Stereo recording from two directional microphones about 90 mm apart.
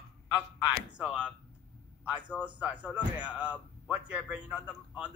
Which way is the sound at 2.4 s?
15° right (ahead or behind).